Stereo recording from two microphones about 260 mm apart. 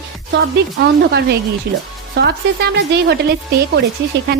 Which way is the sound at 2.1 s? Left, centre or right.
Right.